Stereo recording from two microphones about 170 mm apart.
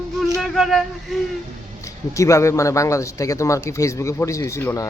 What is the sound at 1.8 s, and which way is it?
Speech, 20° left (ahead or behind).